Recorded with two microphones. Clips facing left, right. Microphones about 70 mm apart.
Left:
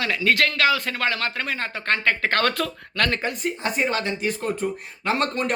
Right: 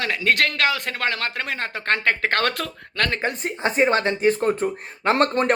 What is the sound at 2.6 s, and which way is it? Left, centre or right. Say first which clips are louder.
Speech: left 1 dB; right.